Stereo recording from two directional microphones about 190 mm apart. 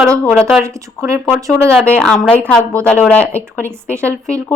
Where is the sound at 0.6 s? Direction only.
15° right (ahead or behind).